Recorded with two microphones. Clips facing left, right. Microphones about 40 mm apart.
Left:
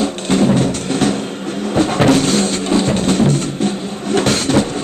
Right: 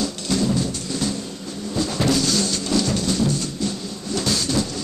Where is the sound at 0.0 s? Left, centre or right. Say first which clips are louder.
Left 8 dB; left.